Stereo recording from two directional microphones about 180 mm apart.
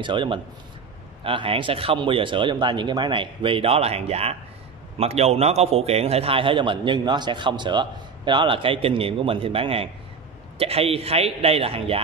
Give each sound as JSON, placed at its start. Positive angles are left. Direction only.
{"t": 0.0, "sound": "a man's voice", "side_deg": -25}